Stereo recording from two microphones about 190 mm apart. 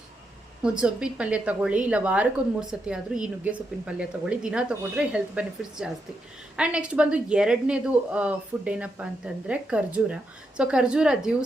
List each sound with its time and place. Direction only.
0.6 s a woman's voice: 5° right (ahead or behind)